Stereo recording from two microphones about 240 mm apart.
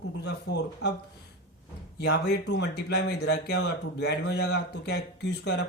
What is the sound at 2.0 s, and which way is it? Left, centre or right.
Speech, left.